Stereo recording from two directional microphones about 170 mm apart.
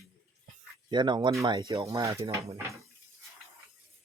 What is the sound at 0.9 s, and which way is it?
Speech, 25° right (ahead or behind).